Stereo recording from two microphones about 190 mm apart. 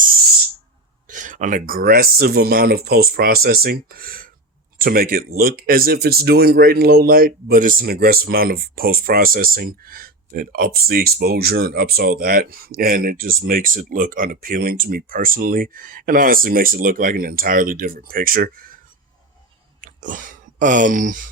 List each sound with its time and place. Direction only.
1.0 s speech: 45° right (ahead or behind)
19.8 s speech: 45° right (ahead or behind)